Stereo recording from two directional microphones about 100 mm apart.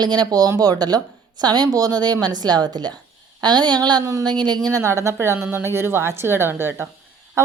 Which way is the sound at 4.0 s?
30° right (ahead or behind).